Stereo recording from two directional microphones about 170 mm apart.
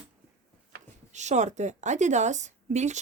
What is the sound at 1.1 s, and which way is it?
A woman's voice, 45° right (ahead or behind).